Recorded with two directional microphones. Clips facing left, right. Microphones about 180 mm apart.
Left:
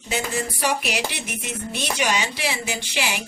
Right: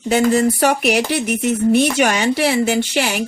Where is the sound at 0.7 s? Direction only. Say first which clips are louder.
Right 9 dB; 50° right (ahead or behind).